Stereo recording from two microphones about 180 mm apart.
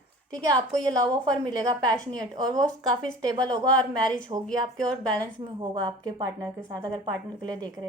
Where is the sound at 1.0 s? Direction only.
25° right (ahead or behind).